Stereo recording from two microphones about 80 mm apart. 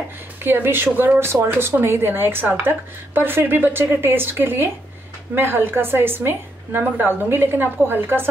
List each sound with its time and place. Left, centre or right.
0.4 s a woman's voice: right